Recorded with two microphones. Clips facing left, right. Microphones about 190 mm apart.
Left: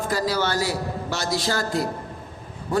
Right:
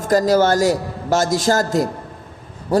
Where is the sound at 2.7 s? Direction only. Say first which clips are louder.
Right 6 dB; 40° right (ahead or behind).